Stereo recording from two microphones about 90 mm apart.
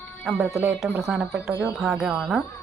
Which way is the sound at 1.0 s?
10° right (ahead or behind).